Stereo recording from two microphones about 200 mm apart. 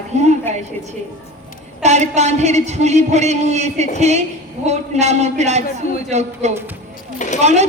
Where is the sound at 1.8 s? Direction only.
35° right (ahead or behind).